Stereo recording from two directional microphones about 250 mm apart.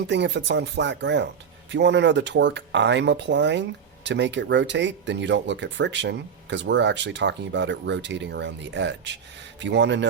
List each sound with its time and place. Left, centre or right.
0.1 s speech: right